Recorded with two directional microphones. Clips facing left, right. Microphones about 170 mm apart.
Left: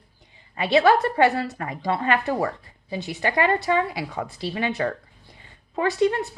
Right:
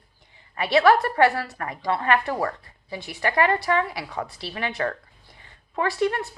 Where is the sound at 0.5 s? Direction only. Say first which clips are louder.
Even; 20° left (ahead or behind).